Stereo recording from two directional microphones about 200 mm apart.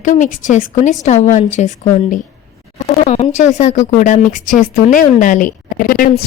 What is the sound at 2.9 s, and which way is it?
A woman's voice, 35° left (ahead or behind).